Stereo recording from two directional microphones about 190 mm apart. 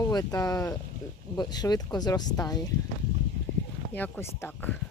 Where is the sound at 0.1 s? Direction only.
20° left (ahead or behind).